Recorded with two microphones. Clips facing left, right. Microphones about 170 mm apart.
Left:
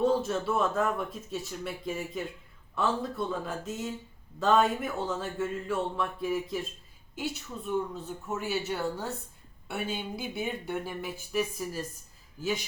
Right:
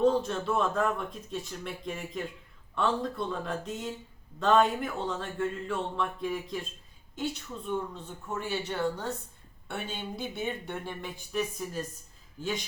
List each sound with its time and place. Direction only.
0.0 s speech: 5° left (ahead or behind)